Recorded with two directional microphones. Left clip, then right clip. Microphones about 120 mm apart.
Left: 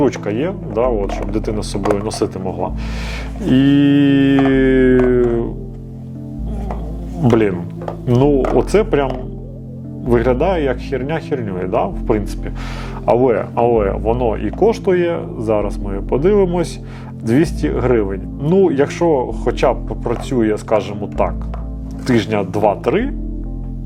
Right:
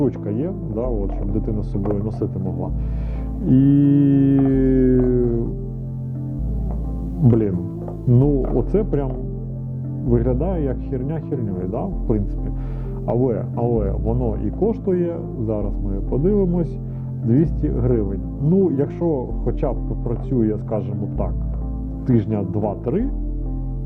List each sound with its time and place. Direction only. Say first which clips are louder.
0.1 s speech: left 6 dB; 20° left (ahead or behind)
3.4 s music: left 4 dB; 20° left (ahead or behind)
7.3 s speech: left 6 dB; 20° left (ahead or behind)